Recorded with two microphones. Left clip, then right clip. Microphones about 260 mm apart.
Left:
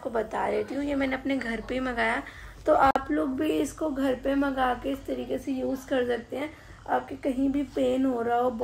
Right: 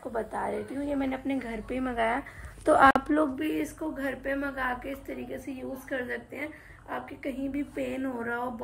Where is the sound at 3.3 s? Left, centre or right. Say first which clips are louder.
Left 4 dB; centre.